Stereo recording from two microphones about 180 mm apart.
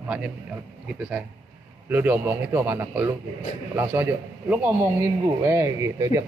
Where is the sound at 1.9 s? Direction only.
10° right (ahead or behind).